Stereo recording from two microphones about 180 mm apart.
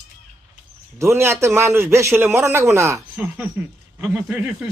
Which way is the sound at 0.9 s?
15° right (ahead or behind).